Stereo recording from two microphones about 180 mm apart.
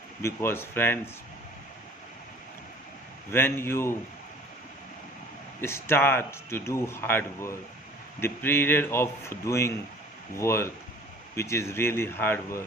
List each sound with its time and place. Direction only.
0.2 s speech: 15° left (ahead or behind)
3.3 s speech: 15° left (ahead or behind)
5.5 s speech: 15° left (ahead or behind)